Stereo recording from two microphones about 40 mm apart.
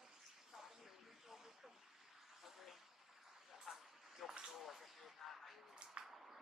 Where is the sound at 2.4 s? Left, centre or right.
Centre.